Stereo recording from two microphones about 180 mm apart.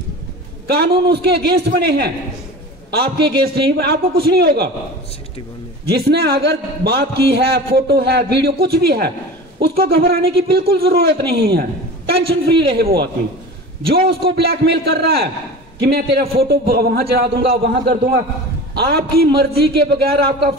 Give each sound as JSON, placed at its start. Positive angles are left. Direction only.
{"t": 0.7, "sound": "a man's voice", "side_deg": -65}
{"t": 5.9, "sound": "a man's voice", "side_deg": -65}